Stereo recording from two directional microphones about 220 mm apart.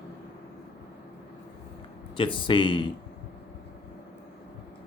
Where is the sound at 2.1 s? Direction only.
25° left (ahead or behind).